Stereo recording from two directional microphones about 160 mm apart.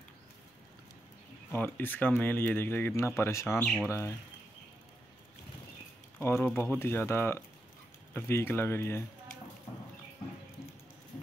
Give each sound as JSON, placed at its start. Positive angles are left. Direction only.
{"t": 1.5, "sound": "speech", "side_deg": 10}
{"t": 6.1, "sound": "speech", "side_deg": 15}